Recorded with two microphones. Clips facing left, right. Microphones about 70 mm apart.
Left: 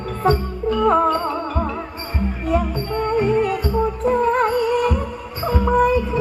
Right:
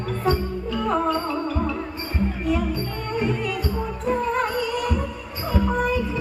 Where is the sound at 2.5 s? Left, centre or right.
Left.